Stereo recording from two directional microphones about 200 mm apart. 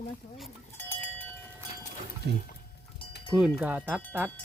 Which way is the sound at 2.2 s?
60° right (ahead or behind).